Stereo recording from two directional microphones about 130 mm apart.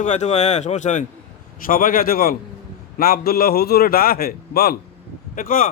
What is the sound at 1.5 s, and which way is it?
Speech, 90° left.